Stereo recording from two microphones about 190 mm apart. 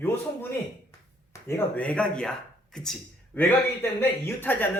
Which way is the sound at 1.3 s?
15° left (ahead or behind).